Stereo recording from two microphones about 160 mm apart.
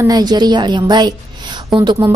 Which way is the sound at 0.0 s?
25° right (ahead or behind).